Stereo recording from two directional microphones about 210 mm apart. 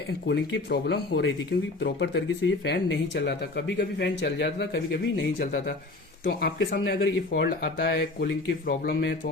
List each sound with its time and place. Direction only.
0.3 s speech: 50° left (ahead or behind)